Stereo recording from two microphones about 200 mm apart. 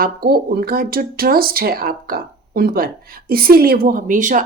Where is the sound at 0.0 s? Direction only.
50° right (ahead or behind).